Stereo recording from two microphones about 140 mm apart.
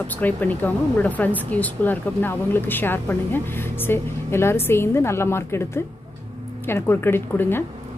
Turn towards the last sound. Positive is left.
turn(degrees=15)  # may be behind; listen again after turning